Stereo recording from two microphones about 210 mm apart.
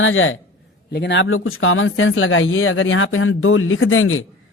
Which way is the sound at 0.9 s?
55° left (ahead or behind).